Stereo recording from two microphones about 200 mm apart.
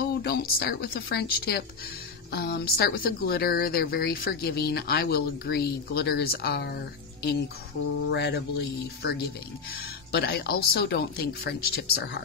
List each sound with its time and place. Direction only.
0.2 s speech: 50° left (ahead or behind)
8.1 s speech: 60° left (ahead or behind)